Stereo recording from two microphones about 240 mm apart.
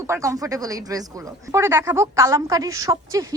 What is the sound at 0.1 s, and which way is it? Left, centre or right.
Speech, centre.